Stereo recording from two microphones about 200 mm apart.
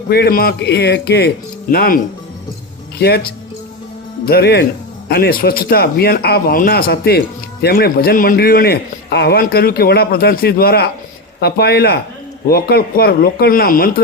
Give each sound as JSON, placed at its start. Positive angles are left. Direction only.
{"t": 0.1, "sound": "a man's voice", "side_deg": 50}
{"t": 3.0, "sound": "a man's voice", "side_deg": 50}